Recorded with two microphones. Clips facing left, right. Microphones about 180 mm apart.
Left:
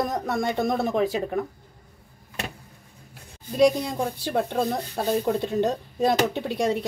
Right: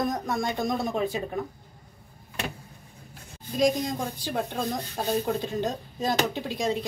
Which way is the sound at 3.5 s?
65° left (ahead or behind).